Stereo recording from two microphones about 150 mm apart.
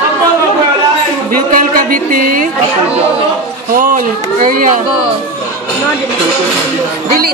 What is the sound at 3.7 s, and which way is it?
Speech, 65° right (ahead or behind).